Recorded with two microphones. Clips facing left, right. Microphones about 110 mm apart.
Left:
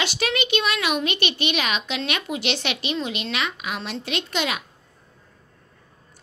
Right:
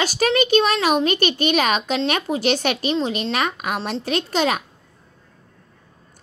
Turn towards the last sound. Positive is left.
turn(degrees=-40)  # may be behind; listen again after turning